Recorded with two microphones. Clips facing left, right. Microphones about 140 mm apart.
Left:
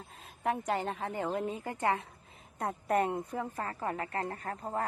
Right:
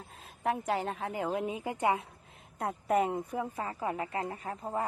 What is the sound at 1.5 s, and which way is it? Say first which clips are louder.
Speech: right 2 dB; 15° right (ahead or behind).